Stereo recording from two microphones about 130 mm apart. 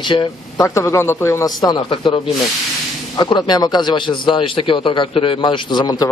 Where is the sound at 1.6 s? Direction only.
40° left (ahead or behind).